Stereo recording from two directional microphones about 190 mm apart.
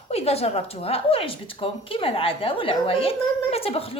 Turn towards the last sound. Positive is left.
turn(degrees=30)  # may be behind; listen again after turning